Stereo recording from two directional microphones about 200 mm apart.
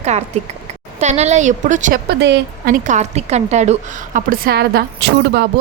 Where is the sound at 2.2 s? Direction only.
50° right (ahead or behind).